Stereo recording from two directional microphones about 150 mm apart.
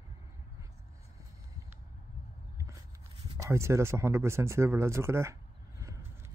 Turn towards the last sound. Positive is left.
turn(degrees=-20)  # may be behind; listen again after turning